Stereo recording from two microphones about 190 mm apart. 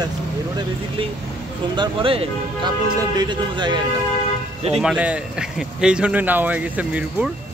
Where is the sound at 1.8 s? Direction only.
25° right (ahead or behind).